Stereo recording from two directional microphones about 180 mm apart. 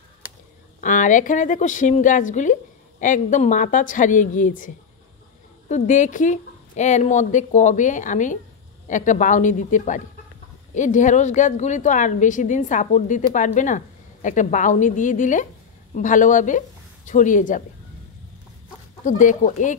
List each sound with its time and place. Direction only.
0.7 s a woman's voice: 45° left (ahead or behind)
19.0 s a woman's voice: 45° left (ahead or behind)